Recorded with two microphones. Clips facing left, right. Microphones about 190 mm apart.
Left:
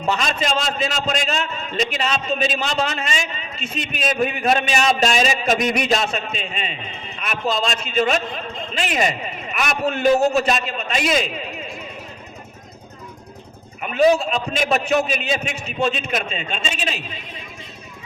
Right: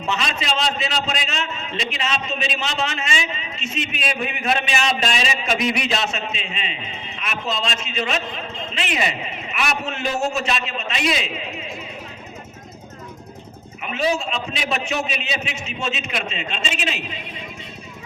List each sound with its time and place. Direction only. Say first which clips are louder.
0.0 s a man's voice: left 3 dB; 45° left (ahead or behind)
13.8 s a man's voice: left 6 dB; 45° left (ahead or behind)
16.3 s a man's voice: left 1 dB; 35° left (ahead or behind)